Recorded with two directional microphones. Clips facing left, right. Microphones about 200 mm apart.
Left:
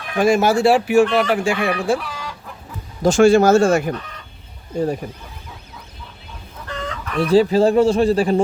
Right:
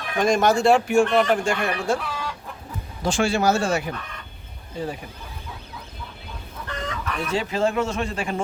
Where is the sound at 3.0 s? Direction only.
45° left (ahead or behind).